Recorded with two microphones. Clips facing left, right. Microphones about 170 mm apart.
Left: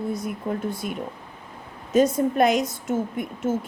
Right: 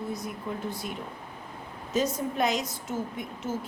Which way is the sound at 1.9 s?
55° left (ahead or behind).